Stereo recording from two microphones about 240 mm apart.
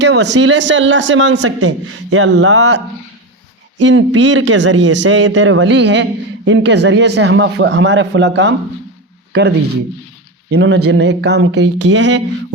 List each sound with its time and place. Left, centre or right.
0.0 s a man's voice: right
2.1 s a man's voice: right
3.8 s a man's voice: right
10.5 s a man's voice: right